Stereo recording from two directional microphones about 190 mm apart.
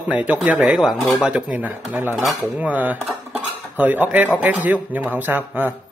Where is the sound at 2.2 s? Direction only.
5° right (ahead or behind).